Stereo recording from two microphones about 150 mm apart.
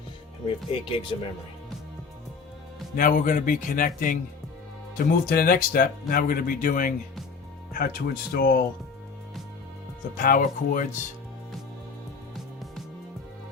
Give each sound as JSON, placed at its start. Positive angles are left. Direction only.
{"t": 0.4, "sound": "speech", "side_deg": 35}
{"t": 2.9, "sound": "speech", "side_deg": 60}
{"t": 7.7, "sound": "speech", "side_deg": 75}
{"t": 10.2, "sound": "speech", "side_deg": 65}